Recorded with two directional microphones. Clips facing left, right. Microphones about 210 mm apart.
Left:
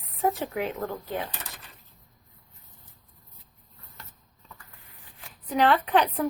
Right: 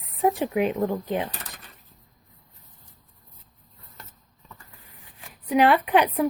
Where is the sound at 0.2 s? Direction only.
15° right (ahead or behind).